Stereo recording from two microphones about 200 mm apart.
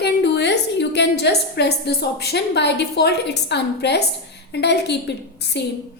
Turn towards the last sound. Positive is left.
turn(degrees=60)  # may be behind; listen again after turning